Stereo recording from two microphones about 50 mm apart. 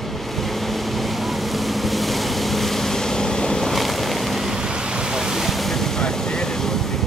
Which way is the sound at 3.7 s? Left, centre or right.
Centre.